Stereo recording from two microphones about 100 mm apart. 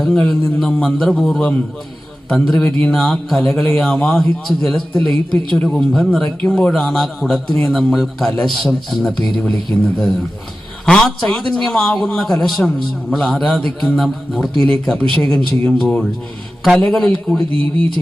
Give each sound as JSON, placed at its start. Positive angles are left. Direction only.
{"t": 0.0, "sound": "a man's voice", "side_deg": 5}
{"t": 10.8, "sound": "a man's voice", "side_deg": 5}
{"t": 17.5, "sound": "speech", "side_deg": -70}